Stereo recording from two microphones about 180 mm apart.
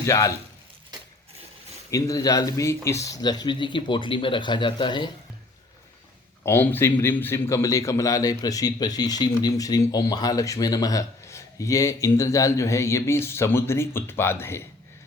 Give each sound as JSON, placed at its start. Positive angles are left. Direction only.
{"t": 0.0, "sound": "speech", "side_deg": 20}
{"t": 1.9, "sound": "speech", "side_deg": 20}
{"t": 6.4, "sound": "a man's voice", "side_deg": 10}